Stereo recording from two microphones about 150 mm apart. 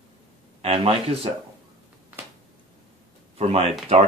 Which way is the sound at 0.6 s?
40° right (ahead or behind).